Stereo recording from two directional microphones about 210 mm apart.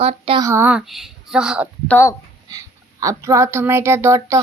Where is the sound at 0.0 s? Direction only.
25° right (ahead or behind).